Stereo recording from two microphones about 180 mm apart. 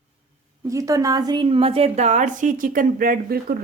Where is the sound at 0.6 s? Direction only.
20° right (ahead or behind); by 3.5 s 55° right (ahead or behind).